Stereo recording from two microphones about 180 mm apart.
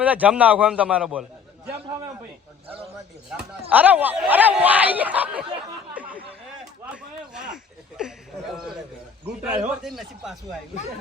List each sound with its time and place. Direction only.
0.0 s speech: 10° right (ahead or behind)
3.7 s speech: 10° right (ahead or behind)
5.9 s a sound: 10° right (ahead or behind)
6.9 s speech: 5° right (ahead or behind)